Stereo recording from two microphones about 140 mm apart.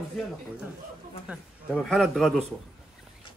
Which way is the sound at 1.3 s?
Centre (ahead or behind).